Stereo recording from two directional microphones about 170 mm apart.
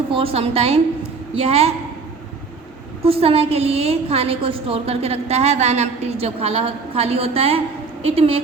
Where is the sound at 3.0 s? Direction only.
35° right (ahead or behind).